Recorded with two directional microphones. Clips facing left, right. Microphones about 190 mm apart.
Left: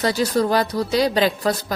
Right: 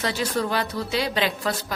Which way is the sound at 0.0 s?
40° left (ahead or behind).